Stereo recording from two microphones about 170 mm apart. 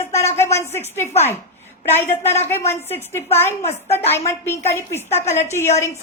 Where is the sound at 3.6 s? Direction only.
40° left (ahead or behind).